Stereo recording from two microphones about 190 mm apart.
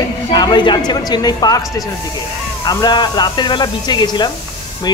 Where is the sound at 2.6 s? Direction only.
20° left (ahead or behind).